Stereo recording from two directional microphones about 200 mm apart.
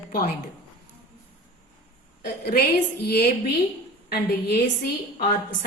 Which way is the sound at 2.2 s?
50° left (ahead or behind).